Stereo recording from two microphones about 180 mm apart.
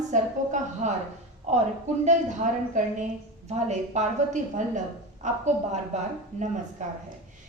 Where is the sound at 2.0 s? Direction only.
45° right (ahead or behind).